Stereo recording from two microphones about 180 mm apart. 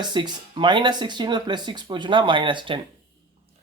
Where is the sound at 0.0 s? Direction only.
25° right (ahead or behind).